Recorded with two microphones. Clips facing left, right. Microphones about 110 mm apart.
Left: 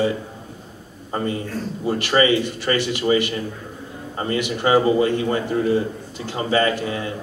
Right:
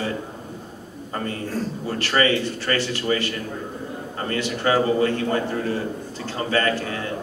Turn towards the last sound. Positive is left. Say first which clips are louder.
# left 3 dB
turn(degrees=15)  # may be behind; listen again after turning